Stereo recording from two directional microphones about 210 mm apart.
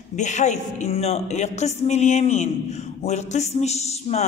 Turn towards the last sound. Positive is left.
turn(degrees=30)  # may be behind; listen again after turning